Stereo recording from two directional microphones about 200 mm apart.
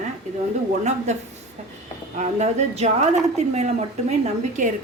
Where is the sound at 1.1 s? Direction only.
35° right (ahead or behind).